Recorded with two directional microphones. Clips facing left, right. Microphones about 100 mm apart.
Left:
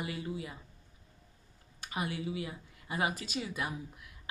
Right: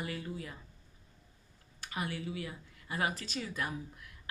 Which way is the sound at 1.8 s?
15° left (ahead or behind).